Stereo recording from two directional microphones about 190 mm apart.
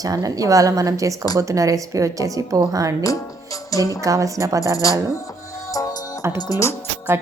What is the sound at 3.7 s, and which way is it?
Speech, 15° left (ahead or behind).